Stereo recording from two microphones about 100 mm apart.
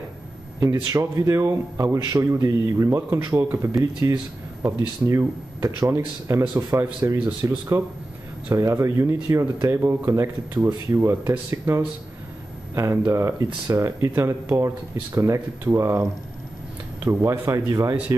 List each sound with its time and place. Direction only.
0.8 s a man's voice: 35° right (ahead or behind)
10.6 s speech: 15° right (ahead or behind)
10.9 s a man's voice: 30° right (ahead or behind)